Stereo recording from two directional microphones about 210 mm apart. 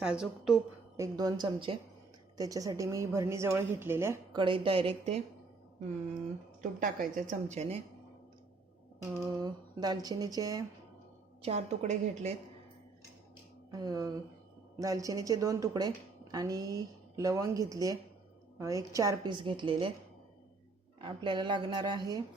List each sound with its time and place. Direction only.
0.0 s a woman's voice: 5° right (ahead or behind)
0.9 s a woman's voice: 15° right (ahead or behind)
6.6 s a woman's voice: 40° right (ahead or behind)
9.0 s a woman's voice: 15° right (ahead or behind)
11.4 s a woman's voice: 30° right (ahead or behind)
13.7 s a woman's voice: 15° right (ahead or behind)
21.0 s a woman's voice: 20° right (ahead or behind)